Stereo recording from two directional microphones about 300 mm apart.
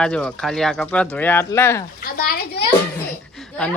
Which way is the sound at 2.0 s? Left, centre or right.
Left.